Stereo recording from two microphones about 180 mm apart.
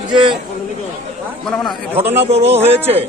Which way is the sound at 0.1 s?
25° right (ahead or behind).